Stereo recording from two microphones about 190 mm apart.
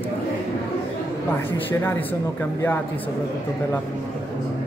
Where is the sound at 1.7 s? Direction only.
10° left (ahead or behind).